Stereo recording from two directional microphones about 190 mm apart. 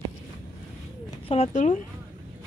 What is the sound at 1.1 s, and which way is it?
Speech, 30° left (ahead or behind).